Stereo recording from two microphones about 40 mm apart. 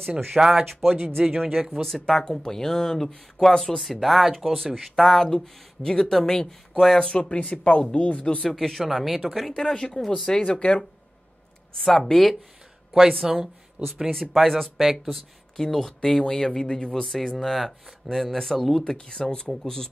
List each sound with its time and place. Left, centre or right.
0.4 s speech: centre
1.5 s speech: centre
3.8 s speech: centre
5.0 s speech: centre
6.7 s speech: centre
7.0 s speech: left
7.3 s speech: left
8.5 s speech: centre
9.6 s speech: centre
11.7 s speech: centre
13.2 s speech: centre
13.8 s speech: right
14.3 s speech: centre
18.9 s speech: centre